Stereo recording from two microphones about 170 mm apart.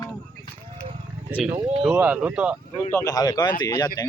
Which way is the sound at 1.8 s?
5° right (ahead or behind).